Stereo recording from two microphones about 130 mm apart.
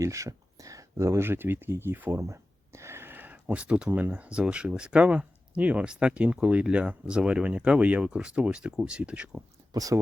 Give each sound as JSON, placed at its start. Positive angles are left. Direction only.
{"t": 0.0, "sound": "speech", "side_deg": -25}
{"t": 9.7, "sound": "speech", "side_deg": -25}